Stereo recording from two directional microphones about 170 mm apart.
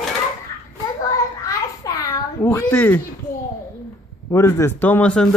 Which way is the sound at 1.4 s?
20° left (ahead or behind).